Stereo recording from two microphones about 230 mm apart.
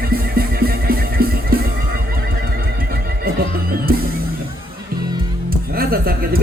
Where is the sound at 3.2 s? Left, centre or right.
Right.